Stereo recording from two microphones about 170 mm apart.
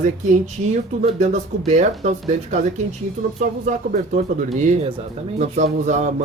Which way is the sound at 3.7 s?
45° right (ahead or behind).